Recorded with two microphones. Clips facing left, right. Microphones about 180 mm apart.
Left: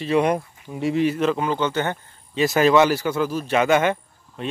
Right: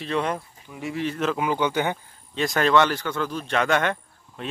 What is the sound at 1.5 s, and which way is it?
Speech, 10° right (ahead or behind).